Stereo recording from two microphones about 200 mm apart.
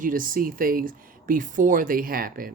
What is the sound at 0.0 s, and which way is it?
Speech, 45° right (ahead or behind).